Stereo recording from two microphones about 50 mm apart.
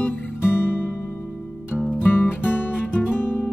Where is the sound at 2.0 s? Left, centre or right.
Left.